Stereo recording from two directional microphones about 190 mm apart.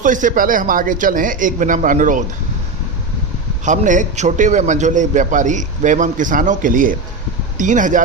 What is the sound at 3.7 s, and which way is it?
A man's voice, 40° right (ahead or behind).